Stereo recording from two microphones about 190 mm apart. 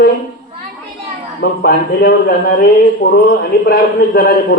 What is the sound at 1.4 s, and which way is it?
A man's voice, 55° left (ahead or behind).